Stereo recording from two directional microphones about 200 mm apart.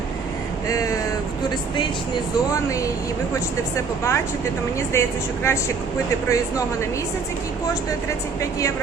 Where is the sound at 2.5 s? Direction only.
15° left (ahead or behind).